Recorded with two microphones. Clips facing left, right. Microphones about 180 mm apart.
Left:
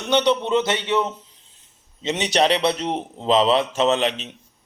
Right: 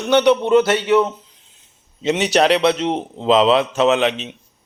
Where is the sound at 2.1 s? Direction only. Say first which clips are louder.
Right 3 dB; 5° right (ahead or behind).